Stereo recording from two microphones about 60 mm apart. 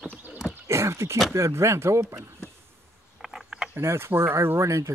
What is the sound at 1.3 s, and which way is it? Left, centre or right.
Speech, right.